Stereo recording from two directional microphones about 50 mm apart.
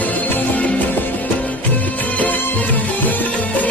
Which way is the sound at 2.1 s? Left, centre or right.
Left.